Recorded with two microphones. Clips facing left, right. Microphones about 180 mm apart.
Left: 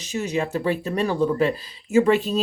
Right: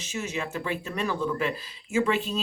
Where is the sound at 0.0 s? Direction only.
35° left (ahead or behind).